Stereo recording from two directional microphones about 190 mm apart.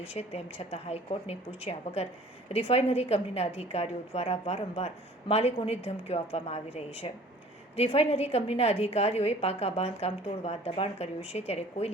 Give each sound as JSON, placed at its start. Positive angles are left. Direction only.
{"t": 0.1, "sound": "a woman's voice", "side_deg": 30}